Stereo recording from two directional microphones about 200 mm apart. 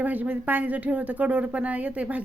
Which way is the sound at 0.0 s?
10° right (ahead or behind).